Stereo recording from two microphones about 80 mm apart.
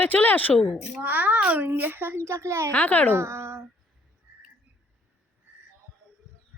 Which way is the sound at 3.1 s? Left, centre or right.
Right.